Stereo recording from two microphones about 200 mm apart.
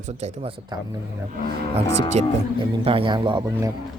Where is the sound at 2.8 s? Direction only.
25° right (ahead or behind).